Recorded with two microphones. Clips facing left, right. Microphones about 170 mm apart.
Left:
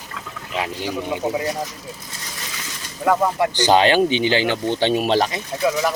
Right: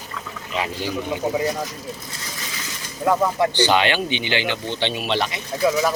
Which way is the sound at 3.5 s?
40° left (ahead or behind).